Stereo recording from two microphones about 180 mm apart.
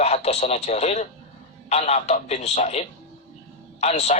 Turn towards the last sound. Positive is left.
turn(degrees=35)  # may be behind; listen again after turning